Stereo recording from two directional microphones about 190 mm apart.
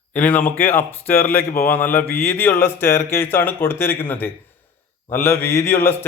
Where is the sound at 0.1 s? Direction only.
10° left (ahead or behind).